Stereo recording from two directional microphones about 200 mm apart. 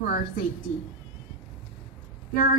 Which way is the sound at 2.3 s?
50° left (ahead or behind).